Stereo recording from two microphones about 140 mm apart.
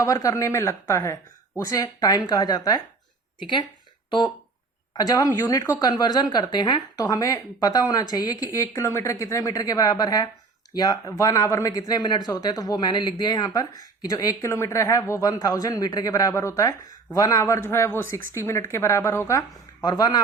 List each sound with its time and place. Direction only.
0.0 s speech: 25° left (ahead or behind)
4.9 s a man's voice: 25° left (ahead or behind)